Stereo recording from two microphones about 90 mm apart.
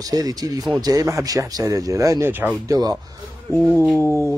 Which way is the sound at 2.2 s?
20° right (ahead or behind).